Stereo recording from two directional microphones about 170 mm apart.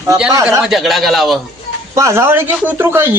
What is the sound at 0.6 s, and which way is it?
Speech, centre (ahead or behind).